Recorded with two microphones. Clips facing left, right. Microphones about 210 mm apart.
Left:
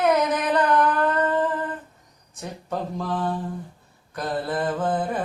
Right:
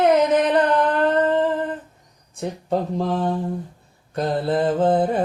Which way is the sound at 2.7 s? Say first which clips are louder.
Right 5 dB; 25° right (ahead or behind).